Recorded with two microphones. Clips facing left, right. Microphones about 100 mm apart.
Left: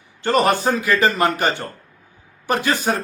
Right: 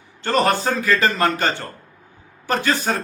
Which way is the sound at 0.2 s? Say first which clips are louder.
Left 1 dB; 15° left (ahead or behind).